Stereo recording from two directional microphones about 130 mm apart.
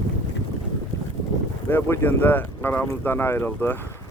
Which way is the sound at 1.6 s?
15° left (ahead or behind).